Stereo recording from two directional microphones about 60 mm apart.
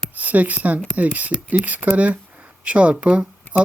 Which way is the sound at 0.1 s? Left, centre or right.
Right.